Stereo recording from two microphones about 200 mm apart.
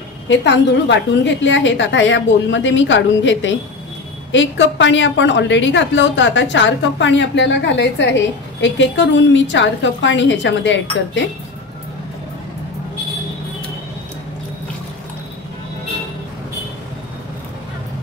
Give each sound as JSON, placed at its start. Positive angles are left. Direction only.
{"t": 0.3, "sound": "a woman's voice", "side_deg": 60}